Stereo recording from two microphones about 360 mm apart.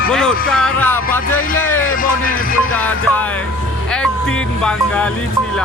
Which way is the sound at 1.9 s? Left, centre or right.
Left.